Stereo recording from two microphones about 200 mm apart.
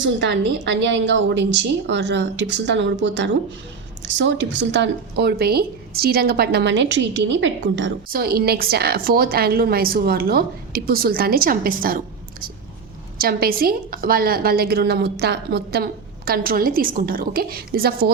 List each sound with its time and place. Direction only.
0.0 s a woman's voice: 65° right (ahead or behind)
8.1 s a woman's voice: 50° right (ahead or behind)